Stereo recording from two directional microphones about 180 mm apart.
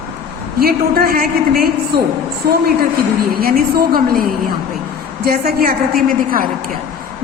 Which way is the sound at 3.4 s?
55° right (ahead or behind).